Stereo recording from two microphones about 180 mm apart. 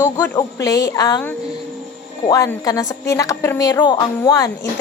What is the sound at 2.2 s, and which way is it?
A woman's voice, 20° left (ahead or behind).